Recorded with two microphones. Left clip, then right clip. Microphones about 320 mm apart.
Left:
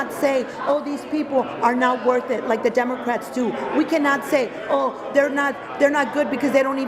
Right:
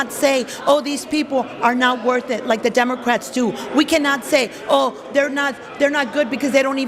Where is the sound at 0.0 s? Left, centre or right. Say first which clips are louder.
Right 3 dB; right.